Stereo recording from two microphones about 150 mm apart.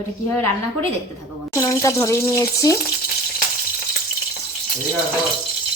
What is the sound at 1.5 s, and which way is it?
Speech, 20° left (ahead or behind).